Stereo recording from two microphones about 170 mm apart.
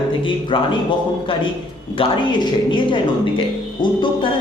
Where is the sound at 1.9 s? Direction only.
30° left (ahead or behind).